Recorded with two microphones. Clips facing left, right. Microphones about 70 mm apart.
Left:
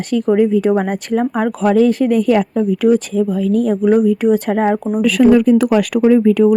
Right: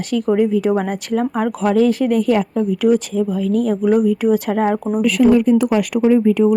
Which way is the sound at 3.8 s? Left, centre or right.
Left.